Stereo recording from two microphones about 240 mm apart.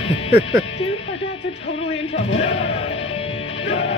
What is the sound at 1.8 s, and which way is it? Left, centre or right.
Speech, left.